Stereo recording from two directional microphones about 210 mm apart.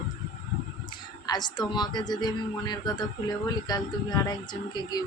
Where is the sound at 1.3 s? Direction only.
20° left (ahead or behind).